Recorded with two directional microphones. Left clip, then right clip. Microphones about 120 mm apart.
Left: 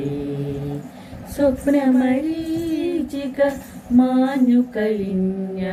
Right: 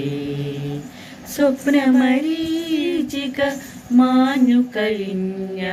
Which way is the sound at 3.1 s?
30° left (ahead or behind).